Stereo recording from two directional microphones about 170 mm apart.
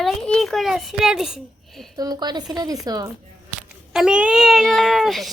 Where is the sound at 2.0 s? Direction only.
25° right (ahead or behind).